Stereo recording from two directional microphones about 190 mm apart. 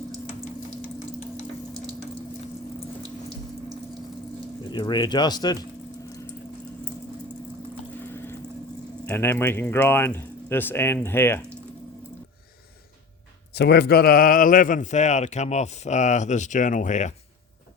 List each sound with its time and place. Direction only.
4.7 s speech: 25° left (ahead or behind)
8.0 s a sound: 10° left (ahead or behind)
9.0 s speech: 10° left (ahead or behind)
13.5 s speech: 60° left (ahead or behind); by 17.2 s 40° left (ahead or behind)